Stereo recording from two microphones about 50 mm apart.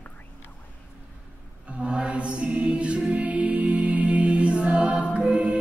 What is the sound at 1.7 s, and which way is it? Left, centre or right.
Choir, right.